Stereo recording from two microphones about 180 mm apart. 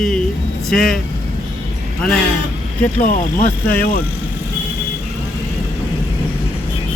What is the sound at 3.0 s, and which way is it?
Speech, 50° left (ahead or behind).